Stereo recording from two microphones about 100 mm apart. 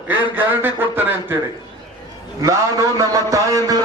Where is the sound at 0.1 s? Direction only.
20° right (ahead or behind).